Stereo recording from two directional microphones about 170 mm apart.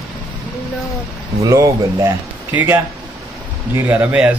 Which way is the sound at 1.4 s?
20° right (ahead or behind).